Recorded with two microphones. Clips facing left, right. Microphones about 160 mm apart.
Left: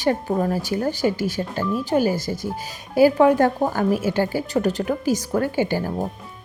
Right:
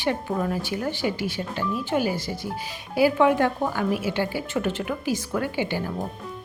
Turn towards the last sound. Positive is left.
turn(degrees=40)  # may be behind; listen again after turning